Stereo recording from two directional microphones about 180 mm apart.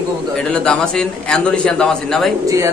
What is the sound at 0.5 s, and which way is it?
A man's voice, 5° left (ahead or behind).